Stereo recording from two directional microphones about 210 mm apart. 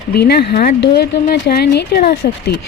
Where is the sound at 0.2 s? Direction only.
50° left (ahead or behind).